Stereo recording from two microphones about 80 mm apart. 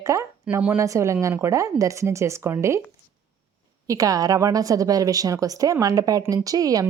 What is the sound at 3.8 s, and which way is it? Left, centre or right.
A woman's voice, right.